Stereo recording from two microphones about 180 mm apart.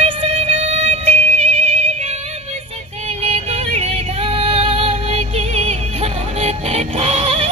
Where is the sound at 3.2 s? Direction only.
35° right (ahead or behind).